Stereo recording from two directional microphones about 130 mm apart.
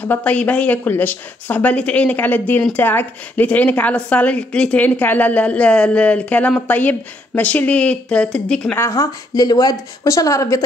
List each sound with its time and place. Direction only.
0.0 s a woman's voice: 10° left (ahead or behind)
8.7 s speech: 20° left (ahead or behind)